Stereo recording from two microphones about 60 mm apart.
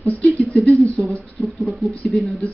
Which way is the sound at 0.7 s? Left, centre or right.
Right.